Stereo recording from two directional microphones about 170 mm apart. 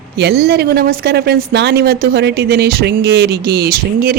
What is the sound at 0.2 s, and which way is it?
Speech, 75° right (ahead or behind).